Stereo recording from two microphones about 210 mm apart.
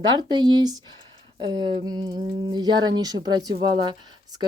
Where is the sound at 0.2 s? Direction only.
20° right (ahead or behind).